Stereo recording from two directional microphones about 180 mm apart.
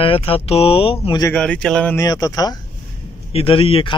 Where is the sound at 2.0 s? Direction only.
20° left (ahead or behind).